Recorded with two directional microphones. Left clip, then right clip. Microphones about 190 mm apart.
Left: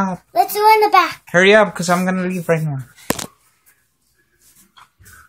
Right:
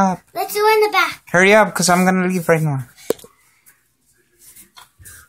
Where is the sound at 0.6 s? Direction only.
40° left (ahead or behind).